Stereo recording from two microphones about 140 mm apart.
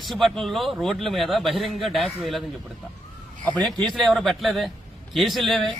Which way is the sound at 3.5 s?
Centre (ahead or behind).